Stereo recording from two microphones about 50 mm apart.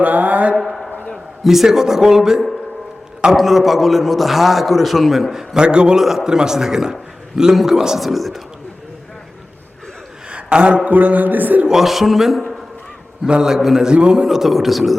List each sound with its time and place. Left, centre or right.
0.0 s mantra: right
0.5 s a sound: centre
1.5 s a man's voice: centre
5.5 s a man's voice: centre
6.0 s a man's voice: centre
10.2 s a sound: right
10.9 s speech: right
11.7 s a man's voice: centre
13.2 s a man's voice: centre
13.6 s a man's voice: centre
13.8 s a man's voice: centre